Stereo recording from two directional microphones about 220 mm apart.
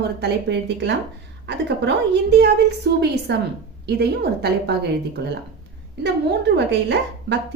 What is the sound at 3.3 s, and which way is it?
A woman's voice, 50° right (ahead or behind).